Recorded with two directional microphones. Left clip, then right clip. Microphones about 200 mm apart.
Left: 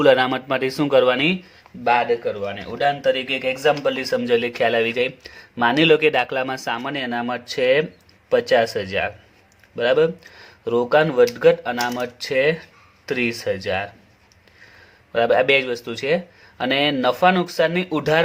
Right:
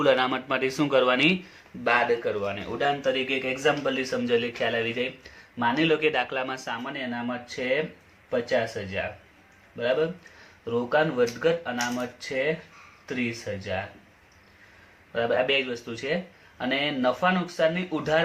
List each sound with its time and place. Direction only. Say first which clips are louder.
0.0 s speech: left 7 dB; 40° left (ahead or behind); by 13.8 s 55° left (ahead or behind)
15.1 s speech: left 8 dB; 50° left (ahead or behind)